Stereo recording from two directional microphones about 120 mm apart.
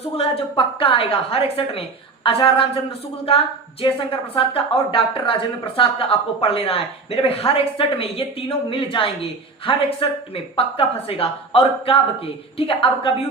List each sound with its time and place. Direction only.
0.2 s a woman's voice: 50° left (ahead or behind)